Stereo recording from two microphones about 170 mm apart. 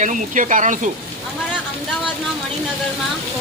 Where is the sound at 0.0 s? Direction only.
50° right (ahead or behind).